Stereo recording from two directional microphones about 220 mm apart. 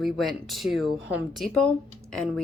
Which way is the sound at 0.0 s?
Centre (ahead or behind).